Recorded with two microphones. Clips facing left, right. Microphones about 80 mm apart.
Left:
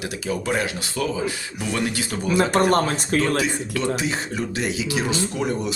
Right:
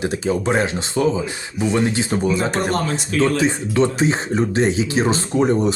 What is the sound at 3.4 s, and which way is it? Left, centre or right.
Speech, right.